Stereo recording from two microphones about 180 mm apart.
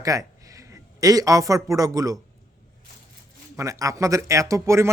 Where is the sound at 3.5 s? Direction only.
15° right (ahead or behind).